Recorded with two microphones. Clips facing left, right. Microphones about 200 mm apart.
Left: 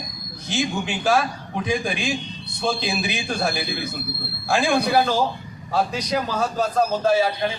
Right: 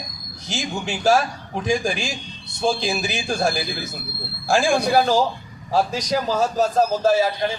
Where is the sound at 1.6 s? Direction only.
45° right (ahead or behind).